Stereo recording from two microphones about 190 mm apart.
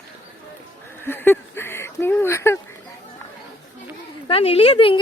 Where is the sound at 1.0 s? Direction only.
10° left (ahead or behind).